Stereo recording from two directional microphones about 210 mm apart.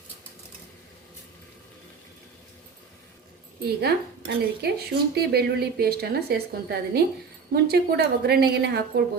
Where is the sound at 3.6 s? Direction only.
50° right (ahead or behind).